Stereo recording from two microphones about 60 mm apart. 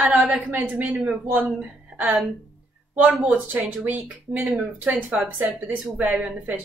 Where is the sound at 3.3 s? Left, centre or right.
Right.